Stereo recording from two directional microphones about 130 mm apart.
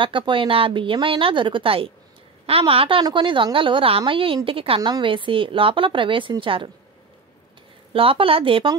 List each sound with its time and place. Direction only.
0.0 s a woman's voice: 40° right (ahead or behind)
7.9 s a woman's voice: 45° right (ahead or behind)